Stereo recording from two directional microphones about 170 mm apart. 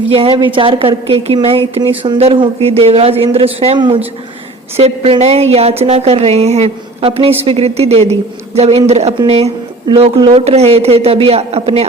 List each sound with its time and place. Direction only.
0.1 s a woman's voice: 30° right (ahead or behind)